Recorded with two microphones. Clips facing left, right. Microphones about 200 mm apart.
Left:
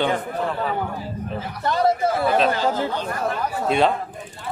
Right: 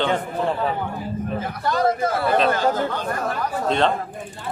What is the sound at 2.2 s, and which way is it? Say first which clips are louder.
Speech: even; centre (ahead or behind).